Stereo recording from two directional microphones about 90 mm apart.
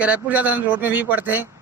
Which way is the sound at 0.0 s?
15° right (ahead or behind).